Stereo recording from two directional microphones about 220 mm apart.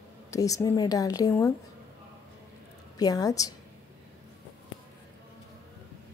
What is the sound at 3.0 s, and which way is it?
Speech, 15° left (ahead or behind).